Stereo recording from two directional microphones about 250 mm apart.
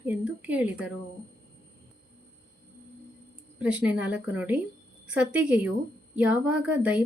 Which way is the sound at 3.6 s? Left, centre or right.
Centre.